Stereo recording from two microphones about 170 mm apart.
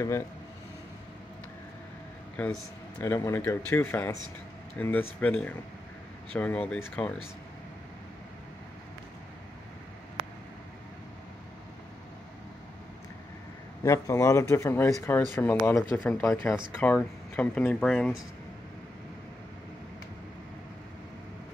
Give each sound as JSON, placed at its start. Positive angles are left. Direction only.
{"t": 2.4, "sound": "speech", "side_deg": 10}
{"t": 13.8, "sound": "speech", "side_deg": 20}